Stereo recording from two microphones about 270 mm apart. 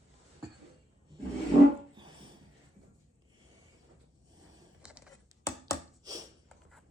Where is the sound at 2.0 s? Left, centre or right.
Centre.